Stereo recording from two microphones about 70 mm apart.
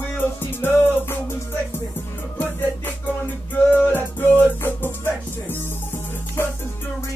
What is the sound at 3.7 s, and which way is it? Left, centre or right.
Music, left.